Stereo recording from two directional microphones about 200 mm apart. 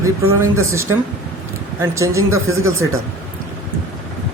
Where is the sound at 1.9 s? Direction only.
15° right (ahead or behind).